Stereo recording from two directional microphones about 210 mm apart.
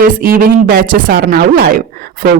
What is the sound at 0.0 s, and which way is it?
Speech, 45° right (ahead or behind).